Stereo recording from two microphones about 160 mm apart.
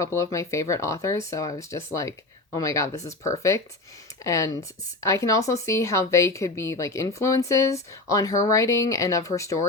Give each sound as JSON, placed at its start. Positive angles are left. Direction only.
{"t": 0.0, "sound": "a woman's voice", "side_deg": 20}